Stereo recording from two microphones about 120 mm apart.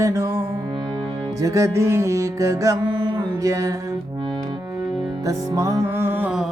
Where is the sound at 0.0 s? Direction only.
25° right (ahead or behind).